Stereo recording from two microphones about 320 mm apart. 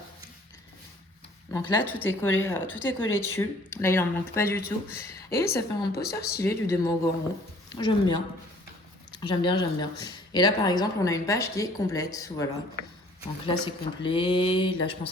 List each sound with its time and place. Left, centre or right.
1.5 s speech: centre